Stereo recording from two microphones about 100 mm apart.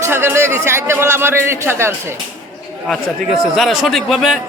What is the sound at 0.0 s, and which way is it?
Speech, 25° right (ahead or behind).